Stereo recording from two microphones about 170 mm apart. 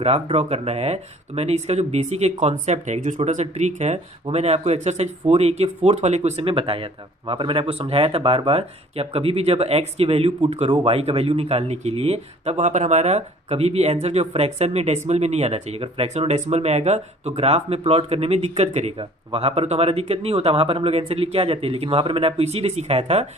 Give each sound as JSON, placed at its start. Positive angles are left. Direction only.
{"t": 0.0, "sound": "speech", "side_deg": -35}